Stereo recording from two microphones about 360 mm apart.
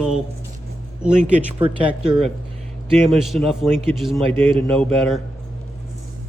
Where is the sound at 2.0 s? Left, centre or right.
Centre.